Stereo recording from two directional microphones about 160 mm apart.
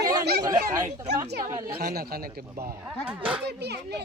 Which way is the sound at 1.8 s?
70° right (ahead or behind).